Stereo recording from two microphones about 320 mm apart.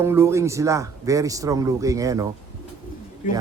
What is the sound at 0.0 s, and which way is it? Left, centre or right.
A man's voice, centre.